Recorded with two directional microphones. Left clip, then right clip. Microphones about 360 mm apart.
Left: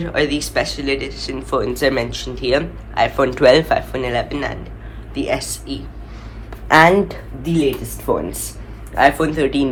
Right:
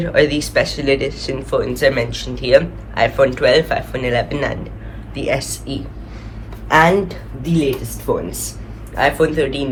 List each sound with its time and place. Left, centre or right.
0.0 s speech: centre
6.7 s a woman's voice: left
8.1 s a woman's voice: left